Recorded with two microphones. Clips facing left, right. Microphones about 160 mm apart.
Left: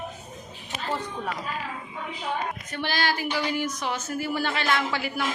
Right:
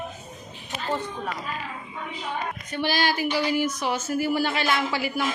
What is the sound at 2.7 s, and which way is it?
Speech, 5° right (ahead or behind).